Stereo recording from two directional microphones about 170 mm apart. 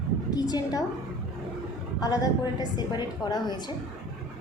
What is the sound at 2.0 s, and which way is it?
A woman's voice, 20° left (ahead or behind).